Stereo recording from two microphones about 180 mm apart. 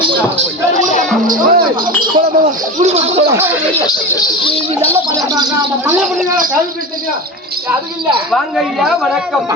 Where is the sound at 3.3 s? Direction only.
15° right (ahead or behind).